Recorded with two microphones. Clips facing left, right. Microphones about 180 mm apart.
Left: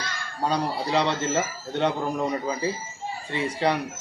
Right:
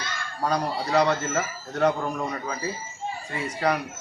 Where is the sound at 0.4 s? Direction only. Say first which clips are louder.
Even; 30° left (ahead or behind).